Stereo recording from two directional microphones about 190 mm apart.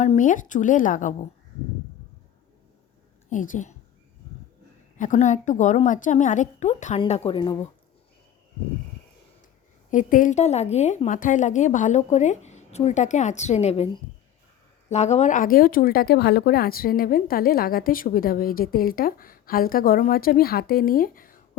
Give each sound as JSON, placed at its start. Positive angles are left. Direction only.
{"t": 0.0, "sound": "speech", "side_deg": 40}
{"t": 3.2, "sound": "a woman's voice", "side_deg": 45}
{"t": 4.9, "sound": "speech", "side_deg": 40}
{"t": 7.0, "sound": "a woman's voice", "side_deg": 25}
{"t": 9.9, "sound": "speech", "side_deg": 45}